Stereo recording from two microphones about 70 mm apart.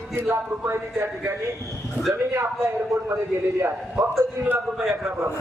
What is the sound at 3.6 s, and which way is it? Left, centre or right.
Speech, right.